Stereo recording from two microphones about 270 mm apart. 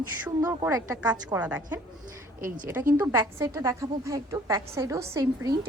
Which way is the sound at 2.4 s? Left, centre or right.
Right.